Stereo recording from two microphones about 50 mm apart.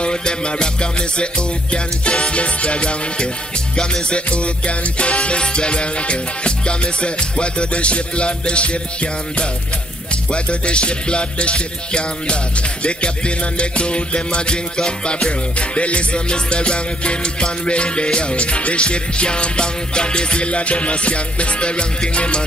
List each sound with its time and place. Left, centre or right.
0.0 s music: centre